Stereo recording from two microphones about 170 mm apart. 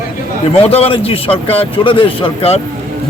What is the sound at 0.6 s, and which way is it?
A man's voice, 35° left (ahead or behind).